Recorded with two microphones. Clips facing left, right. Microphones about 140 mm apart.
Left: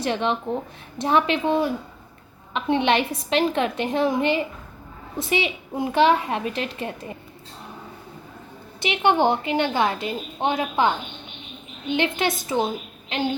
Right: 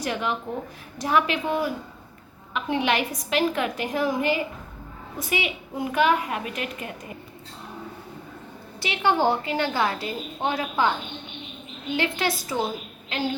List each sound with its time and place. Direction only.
0.0 s a woman's voice: 25° left (ahead or behind)
8.8 s a woman's voice: 20° left (ahead or behind)